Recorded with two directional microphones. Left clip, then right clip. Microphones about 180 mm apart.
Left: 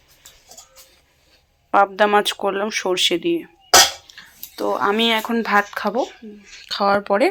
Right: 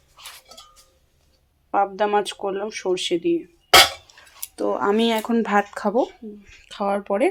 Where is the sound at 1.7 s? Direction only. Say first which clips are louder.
Left 5 dB; 5° left (ahead or behind).